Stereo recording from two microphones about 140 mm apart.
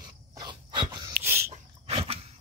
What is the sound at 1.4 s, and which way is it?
Dog, 50° right (ahead or behind).